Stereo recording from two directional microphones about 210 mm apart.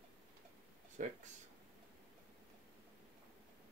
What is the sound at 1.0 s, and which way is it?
Speech, 40° right (ahead or behind).